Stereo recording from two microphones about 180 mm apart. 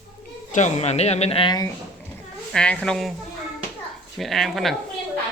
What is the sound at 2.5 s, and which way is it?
Speech, 5° left (ahead or behind).